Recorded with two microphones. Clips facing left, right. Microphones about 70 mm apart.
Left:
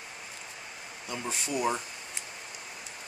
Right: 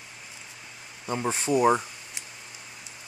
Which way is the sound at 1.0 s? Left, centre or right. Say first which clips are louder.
Right 8 dB; right.